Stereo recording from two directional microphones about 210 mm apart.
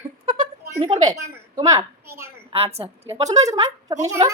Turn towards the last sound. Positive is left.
turn(degrees=-15)  # may be behind; listen again after turning